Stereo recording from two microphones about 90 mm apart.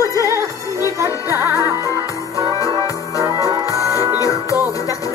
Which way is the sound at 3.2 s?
35° right (ahead or behind).